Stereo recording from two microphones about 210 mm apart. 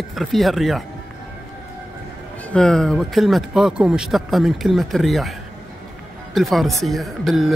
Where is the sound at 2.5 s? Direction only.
5° left (ahead or behind).